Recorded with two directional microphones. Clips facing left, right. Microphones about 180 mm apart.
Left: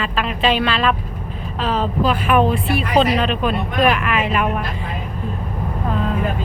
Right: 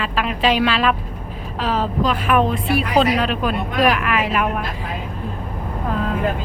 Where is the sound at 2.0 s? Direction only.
5° left (ahead or behind).